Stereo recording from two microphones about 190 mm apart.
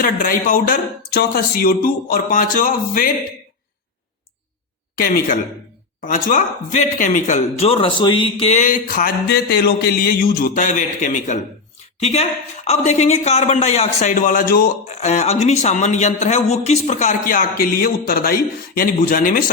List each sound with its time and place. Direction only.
0.0 s speech: 45° left (ahead or behind)
4.9 s a woman's voice: 50° left (ahead or behind)
14.8 s speech: 35° left (ahead or behind)